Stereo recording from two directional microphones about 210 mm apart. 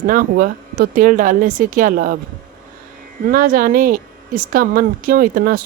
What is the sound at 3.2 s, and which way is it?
Speech, 45° right (ahead or behind).